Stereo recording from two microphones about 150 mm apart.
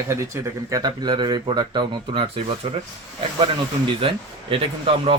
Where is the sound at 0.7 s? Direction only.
30° right (ahead or behind).